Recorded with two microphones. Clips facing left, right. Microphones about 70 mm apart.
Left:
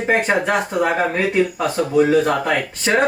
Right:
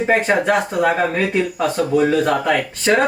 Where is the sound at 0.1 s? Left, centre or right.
Centre.